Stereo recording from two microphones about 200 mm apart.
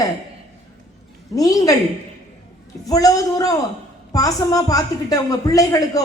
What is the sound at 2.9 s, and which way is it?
A woman's voice, 15° left (ahead or behind).